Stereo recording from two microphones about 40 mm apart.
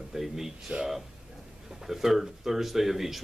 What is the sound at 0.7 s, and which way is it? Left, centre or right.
Speech, right.